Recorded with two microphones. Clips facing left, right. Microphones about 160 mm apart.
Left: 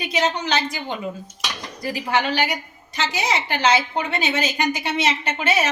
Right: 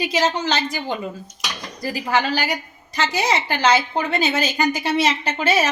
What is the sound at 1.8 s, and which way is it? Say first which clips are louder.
A woman's voice: right 1 dB; 35° right (ahead or behind).